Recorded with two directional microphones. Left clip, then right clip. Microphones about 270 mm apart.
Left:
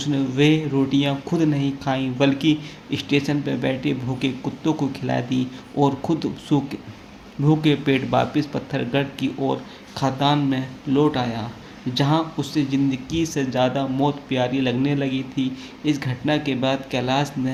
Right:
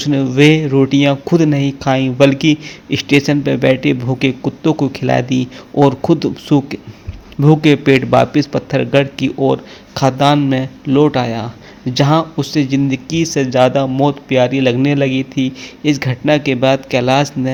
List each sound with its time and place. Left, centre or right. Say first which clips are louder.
0.0 s speech: right 9 dB; right